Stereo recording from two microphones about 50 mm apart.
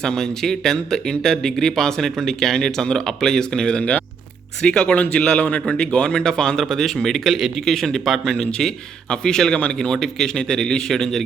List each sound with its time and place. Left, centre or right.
0.0 s speech: centre